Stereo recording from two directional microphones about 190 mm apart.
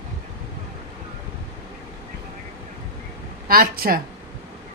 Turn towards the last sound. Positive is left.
turn(degrees=-50)  # may be behind; listen again after turning